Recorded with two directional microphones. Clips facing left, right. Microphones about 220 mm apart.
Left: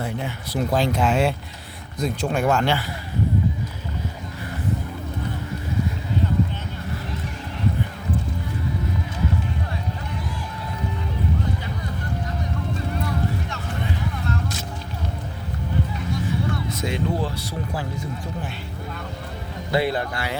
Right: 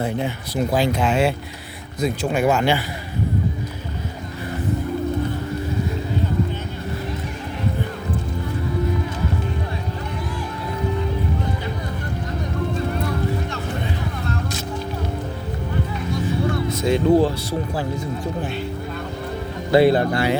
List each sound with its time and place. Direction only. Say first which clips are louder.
0.0 s speech: right 5 dB; 20° right (ahead or behind)
0.7 s speech: right 1 dB; centre (ahead or behind)
16.9 s speech: right 11 dB; 35° right (ahead or behind)
19.7 s speech: right 8 dB; 30° right (ahead or behind)